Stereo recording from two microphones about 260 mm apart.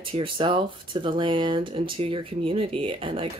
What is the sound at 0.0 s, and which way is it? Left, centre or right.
Speech, centre.